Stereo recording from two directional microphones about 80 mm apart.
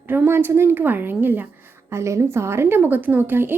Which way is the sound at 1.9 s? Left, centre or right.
Right.